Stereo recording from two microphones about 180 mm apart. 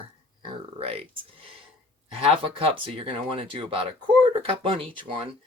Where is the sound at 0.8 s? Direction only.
35° right (ahead or behind).